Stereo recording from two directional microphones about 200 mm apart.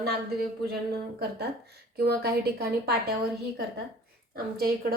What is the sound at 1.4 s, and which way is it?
A woman's voice, 55° right (ahead or behind).